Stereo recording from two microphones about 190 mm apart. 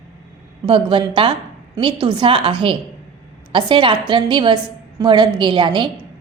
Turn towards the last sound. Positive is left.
turn(degrees=-25)  # may be behind; listen again after turning